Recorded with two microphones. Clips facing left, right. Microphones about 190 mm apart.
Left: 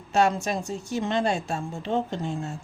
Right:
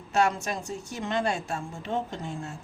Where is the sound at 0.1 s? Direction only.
25° left (ahead or behind).